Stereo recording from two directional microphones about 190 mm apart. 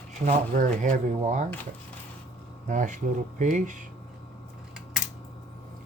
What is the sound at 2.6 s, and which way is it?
Speech, 40° right (ahead or behind).